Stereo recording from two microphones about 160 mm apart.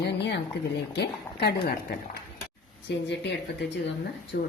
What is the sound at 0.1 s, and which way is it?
A woman's voice, 90° left.